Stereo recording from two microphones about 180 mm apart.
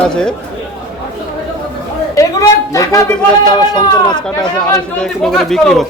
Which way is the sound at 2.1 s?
20° left (ahead or behind).